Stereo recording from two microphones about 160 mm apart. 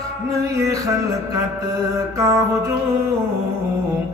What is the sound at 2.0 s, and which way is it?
Music, 20° right (ahead or behind).